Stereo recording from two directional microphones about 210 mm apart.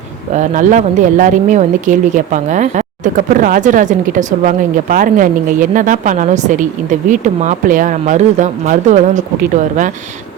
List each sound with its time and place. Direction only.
0.3 s speech: 35° right (ahead or behind)